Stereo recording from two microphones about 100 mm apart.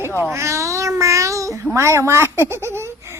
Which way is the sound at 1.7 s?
25° right (ahead or behind).